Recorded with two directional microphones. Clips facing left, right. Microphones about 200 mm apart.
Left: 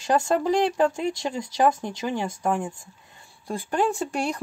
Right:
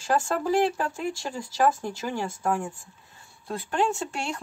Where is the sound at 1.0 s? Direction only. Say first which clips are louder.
Left 4 dB; 20° left (ahead or behind).